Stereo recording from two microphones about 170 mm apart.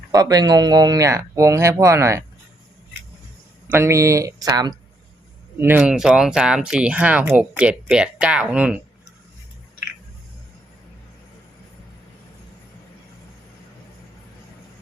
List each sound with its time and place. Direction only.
0.1 s speech: 20° right (ahead or behind)
3.7 s speech: 15° right (ahead or behind)
5.5 s speech: 10° right (ahead or behind)